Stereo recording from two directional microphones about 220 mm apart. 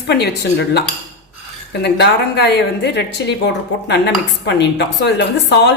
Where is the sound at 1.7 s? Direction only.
50° left (ahead or behind).